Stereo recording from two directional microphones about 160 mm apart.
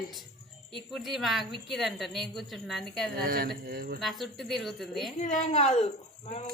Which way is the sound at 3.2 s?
65° right (ahead or behind).